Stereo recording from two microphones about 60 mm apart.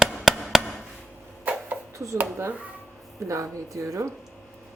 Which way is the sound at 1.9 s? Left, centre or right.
Right.